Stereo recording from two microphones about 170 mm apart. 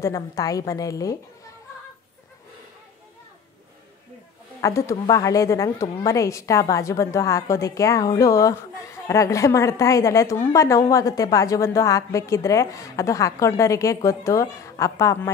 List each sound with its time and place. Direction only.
0.0 s a woman's voice: 20° left (ahead or behind)
4.6 s a woman's voice: 20° left (ahead or behind)